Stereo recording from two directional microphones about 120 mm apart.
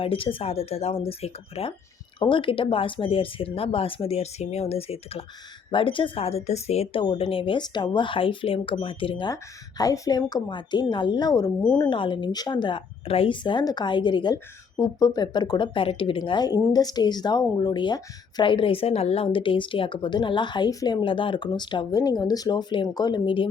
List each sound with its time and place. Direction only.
0.0 s speech: 50° left (ahead or behind)
7.0 s speech: 45° left (ahead or behind)
9.3 s speech: 30° left (ahead or behind)
11.8 s speech: 40° left (ahead or behind)
14.3 s speech: 30° left (ahead or behind); by 23.5 s 45° left (ahead or behind)